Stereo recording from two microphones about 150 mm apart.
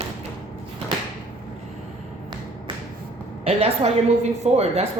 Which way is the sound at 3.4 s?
40° right (ahead or behind).